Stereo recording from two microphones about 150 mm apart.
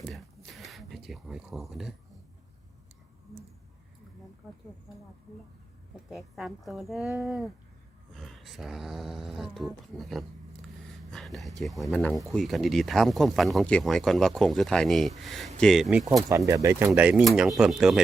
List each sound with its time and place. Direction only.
0.0 s a sound: centre (ahead or behind)
6.1 s speech: centre (ahead or behind)
16.3 s speech: 15° right (ahead or behind)